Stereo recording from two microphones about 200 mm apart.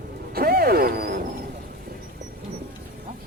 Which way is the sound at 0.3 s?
50° right (ahead or behind).